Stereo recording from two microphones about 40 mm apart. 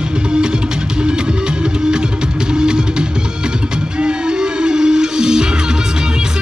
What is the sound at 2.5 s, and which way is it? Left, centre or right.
Music, right.